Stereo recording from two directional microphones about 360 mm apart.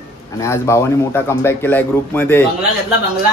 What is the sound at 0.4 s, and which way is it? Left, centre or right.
Speech, centre.